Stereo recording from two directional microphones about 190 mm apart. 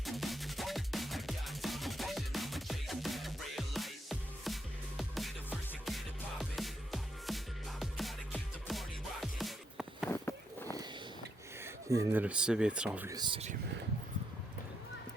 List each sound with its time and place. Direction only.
0.0 s music: centre (ahead or behind)
10.1 s a sound: 10° left (ahead or behind)
11.6 s speech: 15° right (ahead or behind)
13.1 s speech: 25° right (ahead or behind)